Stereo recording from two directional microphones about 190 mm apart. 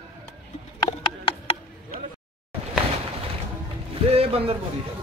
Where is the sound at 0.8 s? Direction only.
35° left (ahead or behind).